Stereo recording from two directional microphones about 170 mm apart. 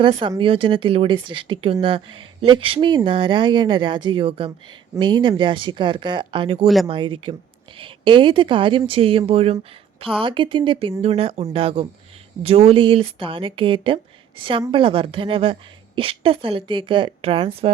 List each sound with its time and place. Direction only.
0.0 s a woman's voice: 30° right (ahead or behind)